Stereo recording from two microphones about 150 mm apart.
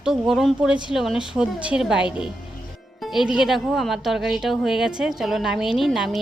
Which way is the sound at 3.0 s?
Centre (ahead or behind).